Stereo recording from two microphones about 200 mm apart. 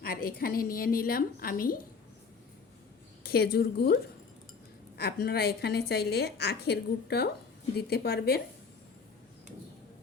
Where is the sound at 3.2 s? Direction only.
50° left (ahead or behind).